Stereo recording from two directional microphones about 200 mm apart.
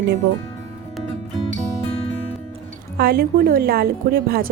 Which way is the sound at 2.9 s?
50° right (ahead or behind).